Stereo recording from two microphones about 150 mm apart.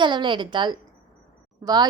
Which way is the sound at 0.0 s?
30° right (ahead or behind).